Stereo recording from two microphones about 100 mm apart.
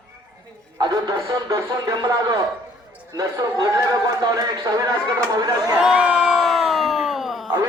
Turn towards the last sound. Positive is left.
turn(degrees=0)  # may be behind; listen again after turning